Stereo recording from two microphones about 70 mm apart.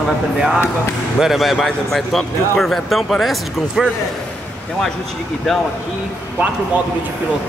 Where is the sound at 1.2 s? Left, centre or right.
Centre.